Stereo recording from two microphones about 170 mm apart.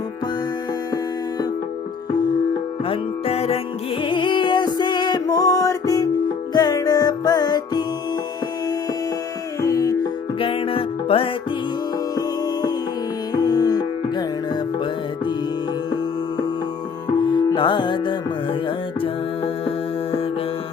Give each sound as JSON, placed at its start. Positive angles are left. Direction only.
{"t": 2.8, "sound": "music", "side_deg": 35}
{"t": 9.6, "sound": "music", "side_deg": 20}
{"t": 10.4, "sound": "music", "side_deg": 30}
{"t": 13.3, "sound": "music", "side_deg": 25}
{"t": 17.2, "sound": "music", "side_deg": 30}
{"t": 19.6, "sound": "music", "side_deg": 35}